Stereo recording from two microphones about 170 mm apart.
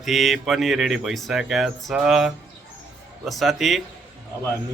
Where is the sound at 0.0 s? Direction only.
Centre (ahead or behind).